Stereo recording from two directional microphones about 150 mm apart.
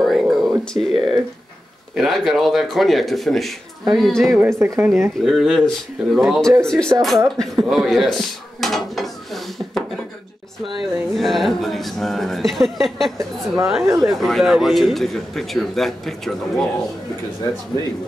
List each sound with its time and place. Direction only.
0.0 s a sound: centre (ahead or behind)
2.0 s speech: centre (ahead or behind)
4.4 s speech: 15° right (ahead or behind)
5.2 s speech: centre (ahead or behind)